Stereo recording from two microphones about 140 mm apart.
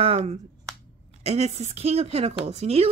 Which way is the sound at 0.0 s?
50° right (ahead or behind).